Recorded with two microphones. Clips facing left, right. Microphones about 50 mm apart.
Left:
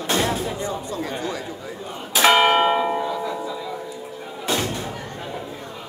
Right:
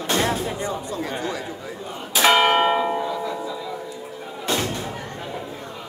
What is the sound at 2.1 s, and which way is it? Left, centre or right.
Church bell, left.